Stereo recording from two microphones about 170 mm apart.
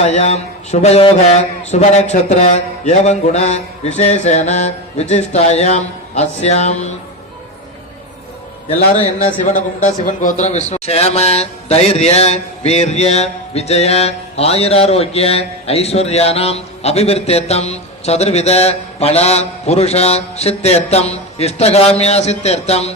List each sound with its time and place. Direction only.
0.0 s a man's voice: 40° left (ahead or behind)
9.2 s a man's voice: 45° left (ahead or behind)